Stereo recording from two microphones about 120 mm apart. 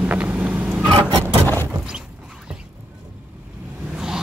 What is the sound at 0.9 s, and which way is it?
Vehicle, 40° right (ahead or behind).